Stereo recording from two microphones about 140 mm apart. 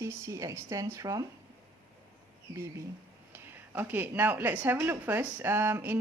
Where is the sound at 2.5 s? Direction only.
20° right (ahead or behind).